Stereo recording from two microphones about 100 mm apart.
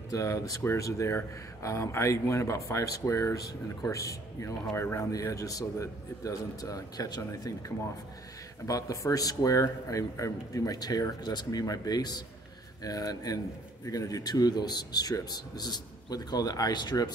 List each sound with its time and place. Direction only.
0.1 s speech: 35° left (ahead or behind)